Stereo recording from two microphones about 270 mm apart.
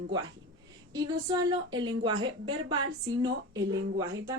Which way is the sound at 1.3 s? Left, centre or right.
Centre.